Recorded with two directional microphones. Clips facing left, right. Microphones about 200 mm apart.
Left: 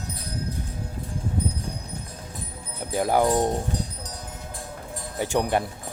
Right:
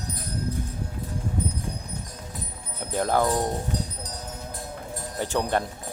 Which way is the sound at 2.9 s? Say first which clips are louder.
Left 2 dB; 10° left (ahead or behind).